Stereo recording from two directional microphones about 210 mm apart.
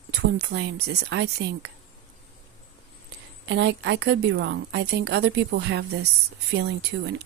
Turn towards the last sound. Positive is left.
turn(degrees=-55)  # may be behind; listen again after turning